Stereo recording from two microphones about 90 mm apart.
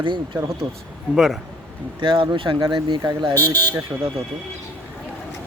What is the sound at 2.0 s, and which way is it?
Speech, 65° right (ahead or behind).